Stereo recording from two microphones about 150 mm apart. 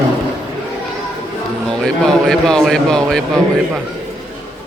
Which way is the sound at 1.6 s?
5° left (ahead or behind).